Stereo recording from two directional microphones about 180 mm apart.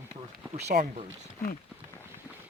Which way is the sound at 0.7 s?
50° right (ahead or behind).